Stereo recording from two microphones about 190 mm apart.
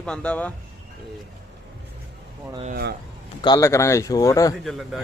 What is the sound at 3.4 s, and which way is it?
Speech, 20° left (ahead or behind).